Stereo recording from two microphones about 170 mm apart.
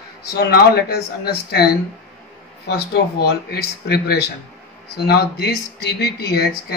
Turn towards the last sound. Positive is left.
turn(degrees=70)  # may be behind; listen again after turning